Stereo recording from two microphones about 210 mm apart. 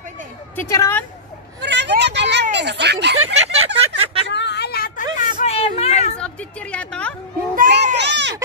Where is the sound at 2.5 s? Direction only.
55° right (ahead or behind).